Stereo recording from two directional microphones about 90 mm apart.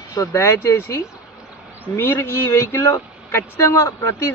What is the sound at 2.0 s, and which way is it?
A man's voice, 30° left (ahead or behind).